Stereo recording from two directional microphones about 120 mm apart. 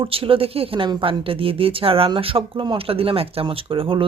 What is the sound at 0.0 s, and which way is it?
Speech, 50° right (ahead or behind).